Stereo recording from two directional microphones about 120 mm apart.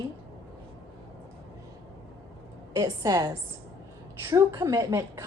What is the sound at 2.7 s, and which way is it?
A woman's voice, 30° right (ahead or behind).